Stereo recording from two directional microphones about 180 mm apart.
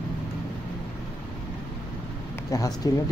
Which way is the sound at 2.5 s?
20° left (ahead or behind).